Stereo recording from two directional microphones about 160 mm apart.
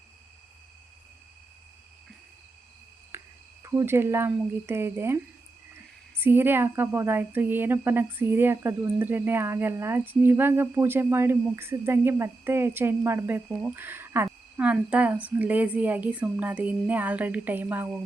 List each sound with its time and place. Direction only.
3.1 s cricket: 15° right (ahead or behind)
3.6 s speech: 20° right (ahead or behind)